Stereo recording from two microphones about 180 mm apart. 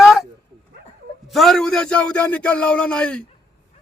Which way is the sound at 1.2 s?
Centre (ahead or behind).